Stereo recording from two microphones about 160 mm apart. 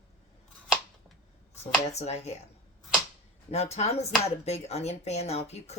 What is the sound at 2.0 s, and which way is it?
Speech, 40° left (ahead or behind).